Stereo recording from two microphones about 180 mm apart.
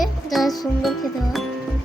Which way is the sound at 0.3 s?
Centre (ahead or behind).